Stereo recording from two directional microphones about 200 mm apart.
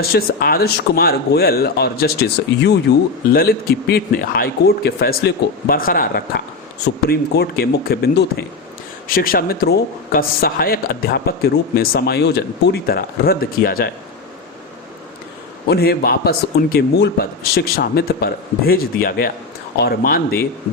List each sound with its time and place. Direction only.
0.0 s a man's voice: 50° left (ahead or behind)
15.6 s a man's voice: 50° left (ahead or behind)